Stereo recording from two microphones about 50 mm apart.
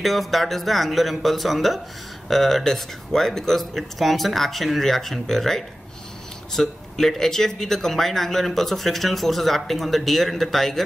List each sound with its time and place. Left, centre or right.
0.0 s speech: centre